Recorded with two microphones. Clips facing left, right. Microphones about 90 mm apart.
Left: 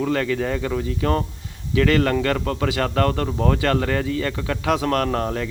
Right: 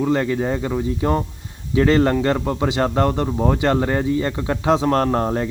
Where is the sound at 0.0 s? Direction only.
20° right (ahead or behind).